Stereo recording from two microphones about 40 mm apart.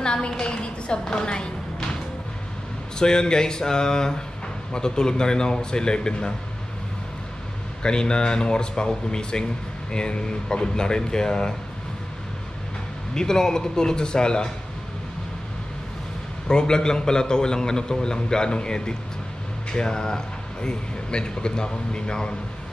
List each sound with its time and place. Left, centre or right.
0.0 s a sound: left
3.0 s a man's voice: centre
7.8 s a man's voice: left
13.1 s a man's voice: centre
16.4 s a man's voice: centre